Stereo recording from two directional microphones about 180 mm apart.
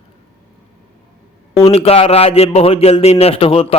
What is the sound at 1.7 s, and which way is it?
A man's voice, 35° left (ahead or behind).